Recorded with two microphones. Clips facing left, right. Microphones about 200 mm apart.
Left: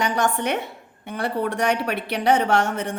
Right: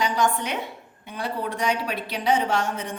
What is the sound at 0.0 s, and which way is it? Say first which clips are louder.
A woman's voice: left 1 dB; 60° left (ahead or behind).